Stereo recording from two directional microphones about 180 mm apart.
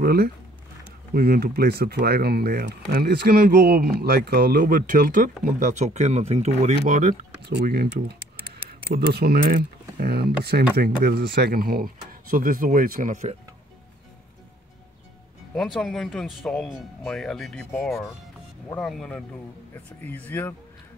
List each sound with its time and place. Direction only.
0.0 s speech: 60° right (ahead or behind)
8.9 s speech: 60° right (ahead or behind)
15.5 s speech: centre (ahead or behind)